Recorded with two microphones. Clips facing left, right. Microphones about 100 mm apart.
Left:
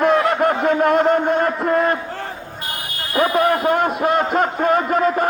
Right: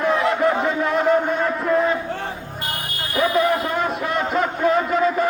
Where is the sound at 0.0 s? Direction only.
60° left (ahead or behind).